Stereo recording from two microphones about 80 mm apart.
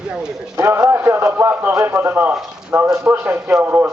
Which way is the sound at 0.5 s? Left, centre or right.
Right.